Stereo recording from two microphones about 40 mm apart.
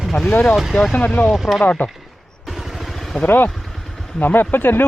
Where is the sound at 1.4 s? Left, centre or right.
Centre.